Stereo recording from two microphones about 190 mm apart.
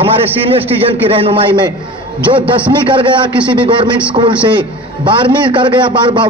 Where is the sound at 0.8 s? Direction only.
30° right (ahead or behind).